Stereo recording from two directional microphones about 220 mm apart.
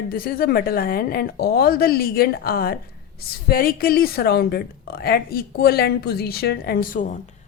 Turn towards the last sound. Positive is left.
turn(degrees=35)  # may be behind; listen again after turning